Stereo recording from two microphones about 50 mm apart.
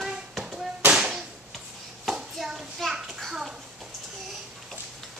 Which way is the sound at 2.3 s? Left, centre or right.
Centre.